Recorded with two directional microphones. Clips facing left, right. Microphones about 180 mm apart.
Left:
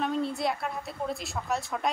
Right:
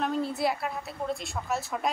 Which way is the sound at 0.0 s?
Centre (ahead or behind).